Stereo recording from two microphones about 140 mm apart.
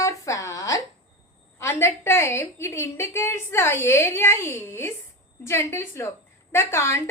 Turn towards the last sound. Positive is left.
turn(degrees=20)  # may be behind; listen again after turning